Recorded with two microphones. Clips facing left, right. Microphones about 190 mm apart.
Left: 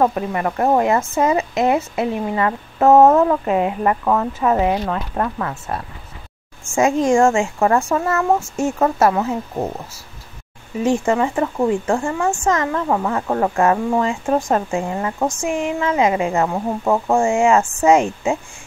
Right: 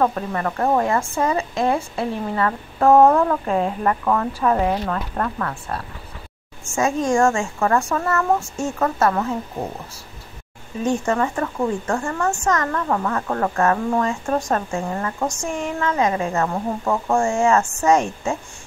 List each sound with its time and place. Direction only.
0.0 s a child's voice: 15° left (ahead or behind)
7.1 s speech: 25° left (ahead or behind)
8.4 s a child's voice: 10° left (ahead or behind)
8.7 s speech: 25° left (ahead or behind)
10.8 s speech: 25° left (ahead or behind)
12.0 s a child's voice: 10° left (ahead or behind)
18.0 s speech: 20° left (ahead or behind)